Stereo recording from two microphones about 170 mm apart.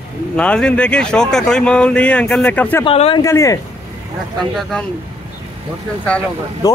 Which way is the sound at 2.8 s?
30° left (ahead or behind).